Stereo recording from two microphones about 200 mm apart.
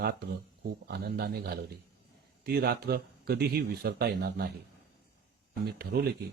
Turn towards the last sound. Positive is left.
turn(degrees=-50)  # may be behind; listen again after turning